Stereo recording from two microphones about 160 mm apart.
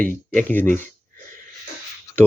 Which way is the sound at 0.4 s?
10° left (ahead or behind).